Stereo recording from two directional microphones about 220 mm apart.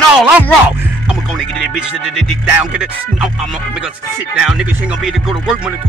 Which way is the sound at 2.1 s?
5° right (ahead or behind).